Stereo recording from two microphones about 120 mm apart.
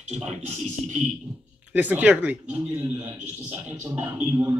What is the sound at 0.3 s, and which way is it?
Music, 75° right (ahead or behind).